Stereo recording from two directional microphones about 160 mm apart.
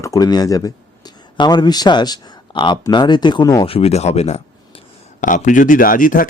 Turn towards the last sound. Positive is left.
turn(degrees=60)  # may be behind; listen again after turning